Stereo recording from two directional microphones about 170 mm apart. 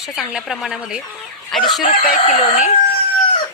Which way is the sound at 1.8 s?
50° left (ahead or behind).